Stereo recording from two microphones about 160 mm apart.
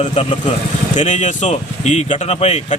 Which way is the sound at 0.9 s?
45° left (ahead or behind).